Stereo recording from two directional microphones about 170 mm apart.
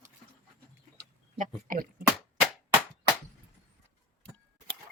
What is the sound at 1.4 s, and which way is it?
Speech, 55° right (ahead or behind).